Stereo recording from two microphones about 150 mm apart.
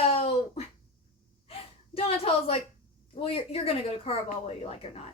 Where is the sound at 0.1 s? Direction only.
40° left (ahead or behind).